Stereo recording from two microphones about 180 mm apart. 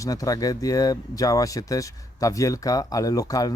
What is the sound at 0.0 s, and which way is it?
Speech, 20° left (ahead or behind).